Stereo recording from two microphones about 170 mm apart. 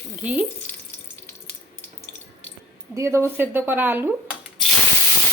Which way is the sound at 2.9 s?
15° right (ahead or behind).